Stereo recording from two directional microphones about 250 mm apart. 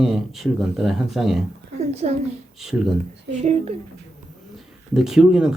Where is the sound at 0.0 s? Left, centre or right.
Centre.